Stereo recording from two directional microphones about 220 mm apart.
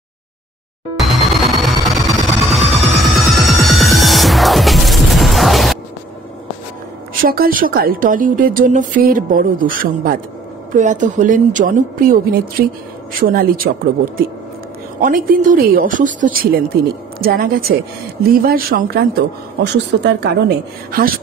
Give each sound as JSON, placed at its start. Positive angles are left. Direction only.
{"t": 0.9, "sound": "music", "side_deg": 0}
{"t": 7.2, "sound": "a woman's voice", "side_deg": -40}
{"t": 15.0, "sound": "a woman's voice", "side_deg": -40}